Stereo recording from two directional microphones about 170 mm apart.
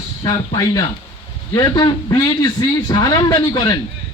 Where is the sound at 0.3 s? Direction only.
20° left (ahead or behind).